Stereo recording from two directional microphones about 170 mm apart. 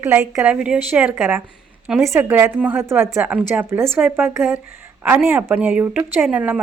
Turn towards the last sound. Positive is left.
turn(degrees=-5)  # may be behind; listen again after turning